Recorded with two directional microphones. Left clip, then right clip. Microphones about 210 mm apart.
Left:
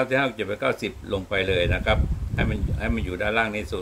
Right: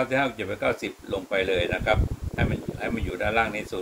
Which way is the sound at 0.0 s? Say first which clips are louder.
Left 2 dB; 35° left (ahead or behind).